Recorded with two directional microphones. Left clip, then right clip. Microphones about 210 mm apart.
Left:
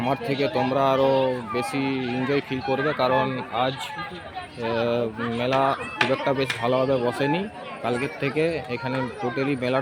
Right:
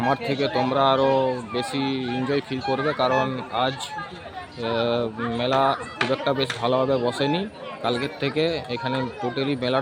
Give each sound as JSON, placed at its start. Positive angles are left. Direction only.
{"t": 0.0, "sound": "speech", "side_deg": 5}
{"t": 6.0, "sound": "speech", "side_deg": 35}
{"t": 6.6, "sound": "speech", "side_deg": 0}